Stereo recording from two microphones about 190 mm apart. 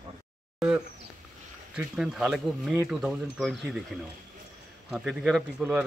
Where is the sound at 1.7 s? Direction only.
5° right (ahead or behind).